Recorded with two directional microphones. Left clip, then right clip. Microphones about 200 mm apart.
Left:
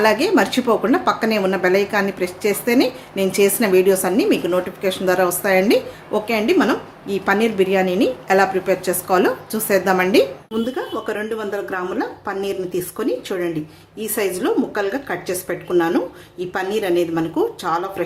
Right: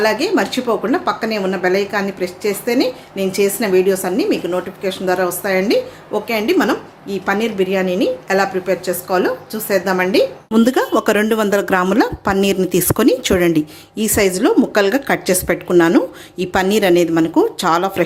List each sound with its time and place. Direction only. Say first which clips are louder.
0.0 s speech: even; centre (ahead or behind)
10.5 s speech: right 9 dB; 45° right (ahead or behind)